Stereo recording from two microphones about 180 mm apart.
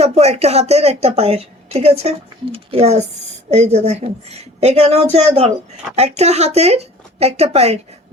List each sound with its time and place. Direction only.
0.0 s a woman's voice: 35° right (ahead or behind)